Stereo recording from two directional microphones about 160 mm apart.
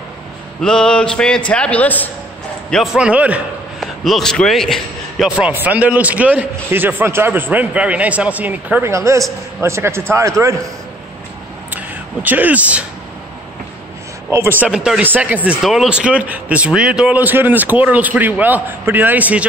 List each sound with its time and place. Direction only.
0.6 s a sound: 5° left (ahead or behind)
1.5 s a man's voice: 10° left (ahead or behind)
2.7 s a man's voice: centre (ahead or behind)
5.5 s a man's voice: 10° right (ahead or behind)
11.7 s a sound: 10° right (ahead or behind)
14.3 s a man's voice: 15° right (ahead or behind)